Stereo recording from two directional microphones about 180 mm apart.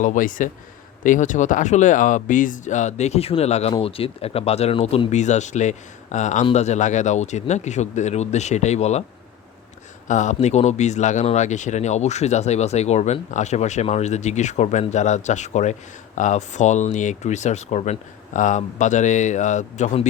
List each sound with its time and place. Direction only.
0.0 s speech: 45° left (ahead or behind)
10.1 s speech: 40° left (ahead or behind)